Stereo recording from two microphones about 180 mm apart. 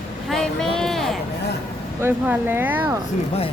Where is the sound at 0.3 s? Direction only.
Centre (ahead or behind).